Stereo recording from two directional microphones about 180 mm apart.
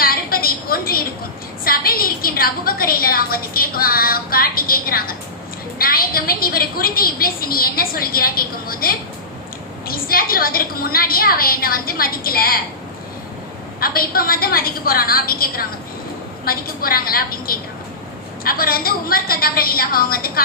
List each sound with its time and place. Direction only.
0.0 s a sound: 55° left (ahead or behind)
1.6 s a woman's voice: 55° left (ahead or behind)
13.7 s a woman's voice: 55° left (ahead or behind)